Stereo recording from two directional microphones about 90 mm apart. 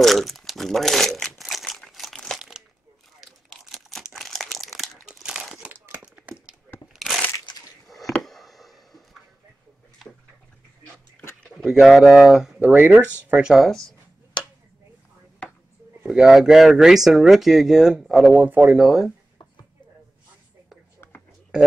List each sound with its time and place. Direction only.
0.0 s crumpling: centre (ahead or behind)
3.6 s crumpling: centre (ahead or behind)
5.9 s a sound: 15° right (ahead or behind)
6.9 s crunch: centre (ahead or behind)
7.9 s a sound: centre (ahead or behind)
11.4 s speech: 5° right (ahead or behind)
12.5 s speech: 15° right (ahead or behind)
16.0 s speech: 10° right (ahead or behind)
21.0 s a sound: 25° left (ahead or behind)